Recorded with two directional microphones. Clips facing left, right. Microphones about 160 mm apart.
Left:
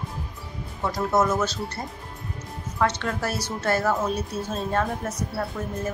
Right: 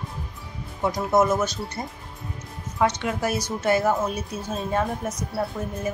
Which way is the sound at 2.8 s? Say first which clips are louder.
Right 2 dB; 15° right (ahead or behind).